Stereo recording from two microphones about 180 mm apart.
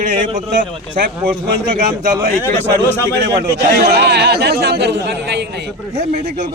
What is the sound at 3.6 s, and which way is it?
A man's voice, 65° right (ahead or behind).